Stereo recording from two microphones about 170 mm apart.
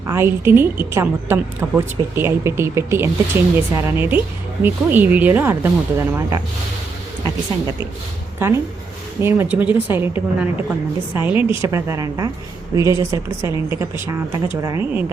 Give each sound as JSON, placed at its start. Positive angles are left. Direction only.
{"t": 0.1, "sound": "a woman's voice", "side_deg": -15}
{"t": 8.4, "sound": "a woman's voice", "side_deg": -15}